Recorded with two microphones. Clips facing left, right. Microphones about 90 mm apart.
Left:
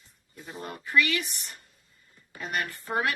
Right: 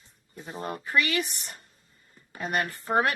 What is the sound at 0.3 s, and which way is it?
A woman's voice, 30° right (ahead or behind).